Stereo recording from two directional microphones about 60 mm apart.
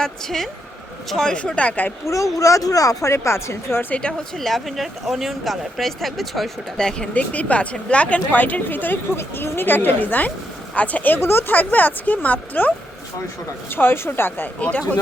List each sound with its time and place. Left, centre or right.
0.0 s a woman's voice: centre; by 1.9 s left
2.0 s speech: left
3.1 s a woman's voice: left
4.4 s speech: centre
7.1 s a woman's voice: left
13.7 s speech: left